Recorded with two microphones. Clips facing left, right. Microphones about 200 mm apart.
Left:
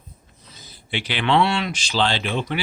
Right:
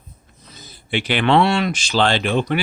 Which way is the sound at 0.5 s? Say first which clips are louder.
Right 5 dB; 55° right (ahead or behind).